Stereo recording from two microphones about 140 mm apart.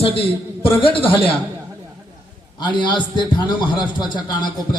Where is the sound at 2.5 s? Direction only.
35° left (ahead or behind).